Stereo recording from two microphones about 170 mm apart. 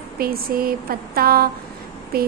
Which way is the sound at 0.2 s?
60° right (ahead or behind).